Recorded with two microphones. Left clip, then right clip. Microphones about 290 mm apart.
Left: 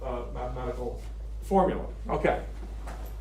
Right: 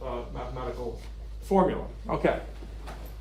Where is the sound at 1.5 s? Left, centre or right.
Right.